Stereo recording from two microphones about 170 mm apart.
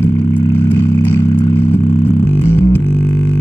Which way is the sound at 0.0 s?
15° left (ahead or behind).